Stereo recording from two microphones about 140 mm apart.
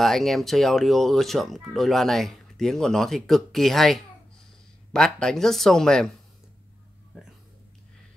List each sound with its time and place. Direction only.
0.0 s speech: centre (ahead or behind)